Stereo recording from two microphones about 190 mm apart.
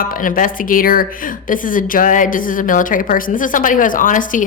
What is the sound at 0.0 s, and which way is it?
Speech, 45° left (ahead or behind).